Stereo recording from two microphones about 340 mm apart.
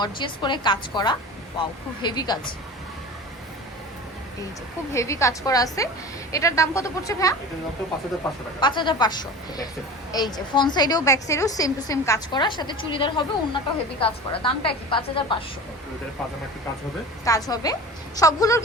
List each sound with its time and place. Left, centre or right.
0.0 s a woman's voice: centre
4.9 s a woman's voice: centre
8.6 s a woman's voice: centre
17.2 s a woman's voice: centre